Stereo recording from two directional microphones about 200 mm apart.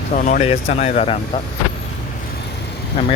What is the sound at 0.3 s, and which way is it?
Speech, 35° left (ahead or behind).